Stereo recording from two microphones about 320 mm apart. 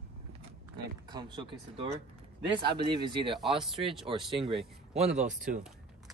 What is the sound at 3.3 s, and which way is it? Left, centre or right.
Speech, centre.